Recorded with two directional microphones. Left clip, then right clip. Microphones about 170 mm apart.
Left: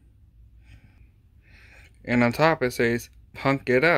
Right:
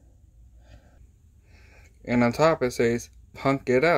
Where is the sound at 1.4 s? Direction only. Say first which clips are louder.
Left 4 dB; centre (ahead or behind).